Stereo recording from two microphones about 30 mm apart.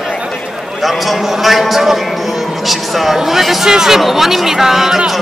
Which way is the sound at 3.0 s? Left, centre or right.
Centre.